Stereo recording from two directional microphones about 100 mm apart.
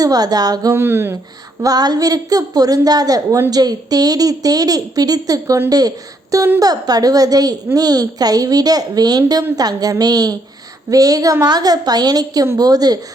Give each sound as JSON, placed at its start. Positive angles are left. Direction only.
{"t": 0.0, "sound": "a woman's voice", "side_deg": -40}
{"t": 0.7, "sound": "a sound", "side_deg": -25}
{"t": 1.6, "sound": "a woman's voice", "side_deg": -40}